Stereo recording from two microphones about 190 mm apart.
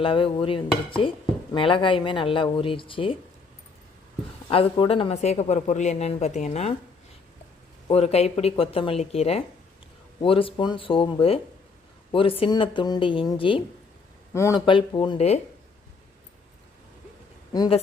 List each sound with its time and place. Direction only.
0.0 s speech: 30° left (ahead or behind)
4.4 s speech: 30° left (ahead or behind)
7.9 s speech: 35° left (ahead or behind)
17.5 s speech: 20° left (ahead or behind)